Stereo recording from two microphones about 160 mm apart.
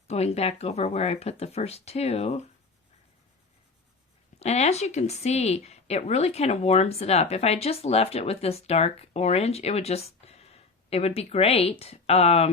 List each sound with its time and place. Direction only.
0.1 s speech: 40° left (ahead or behind)
4.4 s speech: 40° left (ahead or behind)